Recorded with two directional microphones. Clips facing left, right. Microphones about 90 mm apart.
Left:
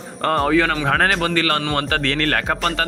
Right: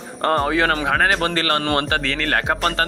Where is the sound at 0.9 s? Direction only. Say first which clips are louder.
Even; 10° right (ahead or behind).